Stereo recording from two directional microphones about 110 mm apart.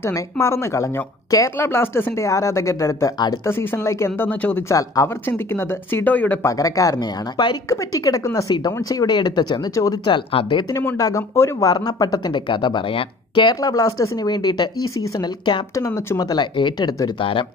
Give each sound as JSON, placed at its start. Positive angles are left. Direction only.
{"t": 0.0, "sound": "speech", "side_deg": 25}
{"t": 3.4, "sound": "speech", "side_deg": 20}
{"t": 4.6, "sound": "speech", "side_deg": 30}
{"t": 6.4, "sound": "speech", "side_deg": 30}
{"t": 10.0, "sound": "speech", "side_deg": 45}
{"t": 10.7, "sound": "speech", "side_deg": 20}
{"t": 11.0, "sound": "speech", "side_deg": 30}
{"t": 11.7, "sound": "speech", "side_deg": 35}